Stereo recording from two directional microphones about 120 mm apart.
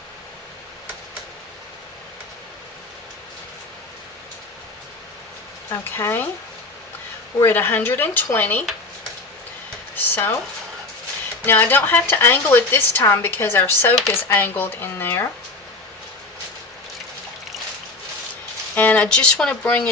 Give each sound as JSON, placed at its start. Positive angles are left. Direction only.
{"t": 5.7, "sound": "speech", "side_deg": 20}
{"t": 7.4, "sound": "a woman's voice", "side_deg": 20}
{"t": 9.9, "sound": "speech", "side_deg": 20}
{"t": 11.4, "sound": "a woman's voice", "side_deg": 15}
{"t": 18.7, "sound": "speech", "side_deg": 15}